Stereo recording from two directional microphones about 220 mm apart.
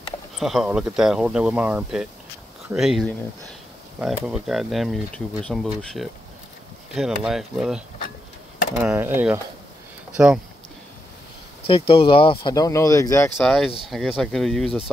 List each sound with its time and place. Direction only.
0.4 s speech: centre (ahead or behind)
8.8 s speech: 10° right (ahead or behind)
11.9 s speech: 25° left (ahead or behind)
13.4 s speech: centre (ahead or behind)